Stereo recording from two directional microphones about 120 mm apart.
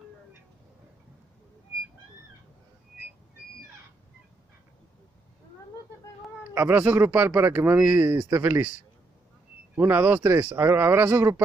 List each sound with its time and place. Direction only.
6.5 s speech: 15° right (ahead or behind)
9.8 s speech: 15° right (ahead or behind)